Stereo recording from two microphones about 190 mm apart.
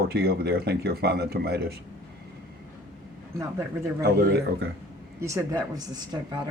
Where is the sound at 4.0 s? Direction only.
55° right (ahead or behind).